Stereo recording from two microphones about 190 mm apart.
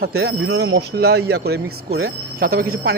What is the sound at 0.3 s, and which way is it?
Speech, 65° right (ahead or behind).